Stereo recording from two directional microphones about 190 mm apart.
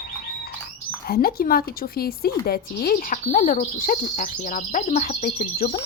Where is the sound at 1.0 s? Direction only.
50° left (ahead or behind).